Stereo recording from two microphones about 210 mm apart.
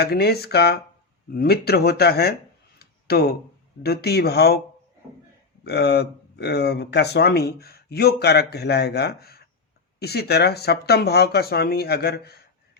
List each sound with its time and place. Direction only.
0.0 s speech: 50° left (ahead or behind)
2.7 s a sound: 50° left (ahead or behind)
3.8 s speech: 50° left (ahead or behind)
5.6 s speech: 50° left (ahead or behind)